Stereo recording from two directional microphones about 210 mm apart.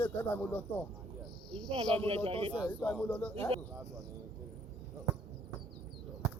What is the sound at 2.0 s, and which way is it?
Speech, 30° right (ahead or behind).